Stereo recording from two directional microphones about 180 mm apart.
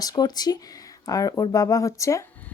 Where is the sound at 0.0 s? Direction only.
20° left (ahead or behind).